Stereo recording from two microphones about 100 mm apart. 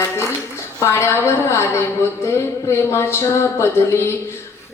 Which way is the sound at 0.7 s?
30° left (ahead or behind).